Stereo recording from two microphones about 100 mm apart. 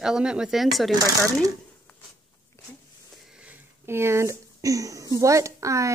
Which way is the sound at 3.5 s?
25° right (ahead or behind).